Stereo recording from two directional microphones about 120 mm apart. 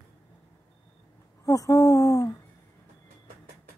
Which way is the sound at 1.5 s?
30° left (ahead or behind).